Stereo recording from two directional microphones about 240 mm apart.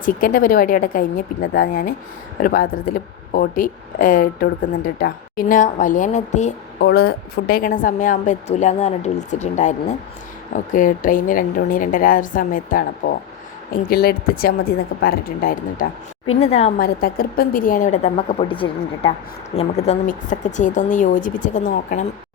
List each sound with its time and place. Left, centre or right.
0.0 s speech: left
6.7 s speech: left
16.3 s speech: left
16.7 s speech: left